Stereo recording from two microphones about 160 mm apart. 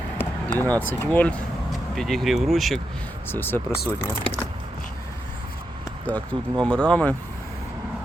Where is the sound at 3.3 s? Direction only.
10° left (ahead or behind).